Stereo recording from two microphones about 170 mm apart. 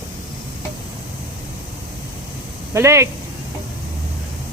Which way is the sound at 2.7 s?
15° right (ahead or behind).